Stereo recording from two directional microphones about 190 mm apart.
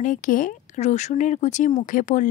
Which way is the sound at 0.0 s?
45° left (ahead or behind).